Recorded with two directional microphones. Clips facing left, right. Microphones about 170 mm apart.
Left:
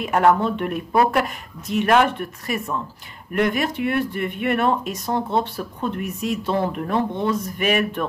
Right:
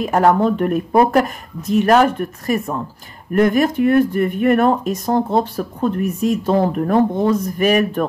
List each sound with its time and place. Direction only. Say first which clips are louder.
0.0 s speech: right 3 dB; 40° right (ahead or behind)